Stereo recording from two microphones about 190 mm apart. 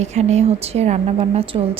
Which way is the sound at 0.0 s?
35° right (ahead or behind).